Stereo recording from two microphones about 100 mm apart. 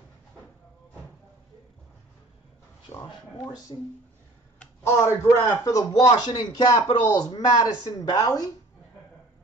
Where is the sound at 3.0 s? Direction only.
45° left (ahead or behind).